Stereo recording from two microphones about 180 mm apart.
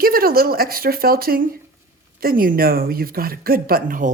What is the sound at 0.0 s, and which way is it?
A woman's voice, 55° right (ahead or behind).